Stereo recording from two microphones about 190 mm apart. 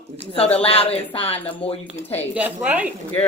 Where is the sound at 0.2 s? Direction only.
30° left (ahead or behind).